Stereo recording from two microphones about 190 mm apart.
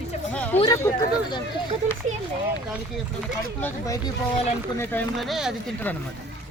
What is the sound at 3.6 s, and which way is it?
Speech, 20° left (ahead or behind).